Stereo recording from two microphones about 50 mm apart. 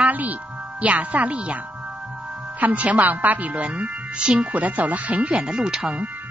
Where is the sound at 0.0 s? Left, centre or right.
Right.